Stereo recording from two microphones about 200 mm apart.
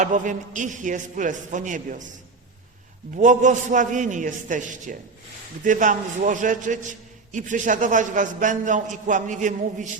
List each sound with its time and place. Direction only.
0.0 s a man's voice: 40° right (ahead or behind)
3.2 s a man's voice: 40° right (ahead or behind)